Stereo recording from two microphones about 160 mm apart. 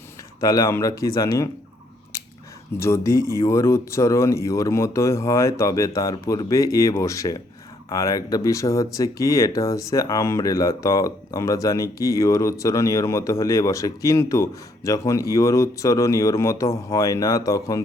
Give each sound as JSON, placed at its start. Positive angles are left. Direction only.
{"t": 0.3, "sound": "speech", "side_deg": 20}
{"t": 2.7, "sound": "speech", "side_deg": 15}